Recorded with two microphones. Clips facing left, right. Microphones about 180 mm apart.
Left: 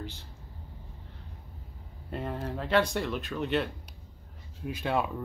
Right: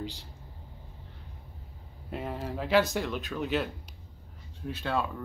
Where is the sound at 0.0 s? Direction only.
15° right (ahead or behind).